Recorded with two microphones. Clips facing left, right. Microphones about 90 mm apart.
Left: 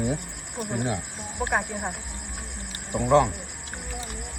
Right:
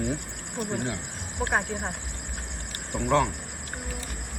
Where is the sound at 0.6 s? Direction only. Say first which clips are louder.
Left 2 dB; 10° left (ahead or behind).